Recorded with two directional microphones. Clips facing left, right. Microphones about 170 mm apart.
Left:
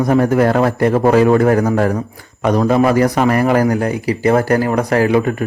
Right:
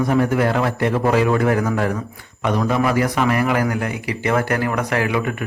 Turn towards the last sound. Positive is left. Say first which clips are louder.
# left 7 dB
turn(degrees=35)  # may be behind; listen again after turning